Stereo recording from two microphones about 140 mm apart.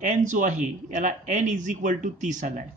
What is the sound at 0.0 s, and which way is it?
Speech, 65° right (ahead or behind).